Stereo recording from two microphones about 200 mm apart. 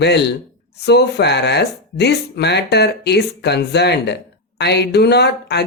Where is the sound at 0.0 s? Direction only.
55° left (ahead or behind).